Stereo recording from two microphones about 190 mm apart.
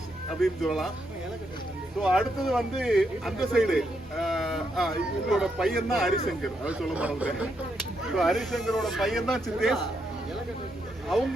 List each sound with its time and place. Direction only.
0.3 s speech: centre (ahead or behind)
2.0 s speech: centre (ahead or behind)